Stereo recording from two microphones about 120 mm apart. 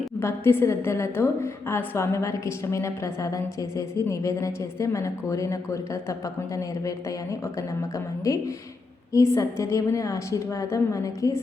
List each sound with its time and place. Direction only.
0.2 s a woman's voice: 20° left (ahead or behind)